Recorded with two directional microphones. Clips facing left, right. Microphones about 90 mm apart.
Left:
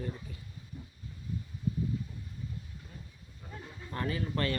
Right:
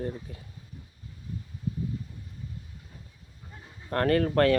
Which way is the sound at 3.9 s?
70° right (ahead or behind).